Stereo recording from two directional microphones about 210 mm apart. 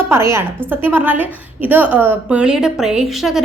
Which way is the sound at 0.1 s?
10° right (ahead or behind).